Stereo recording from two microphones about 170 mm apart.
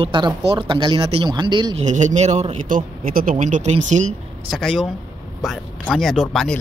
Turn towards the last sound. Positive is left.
turn(degrees=0)  # may be behind; listen again after turning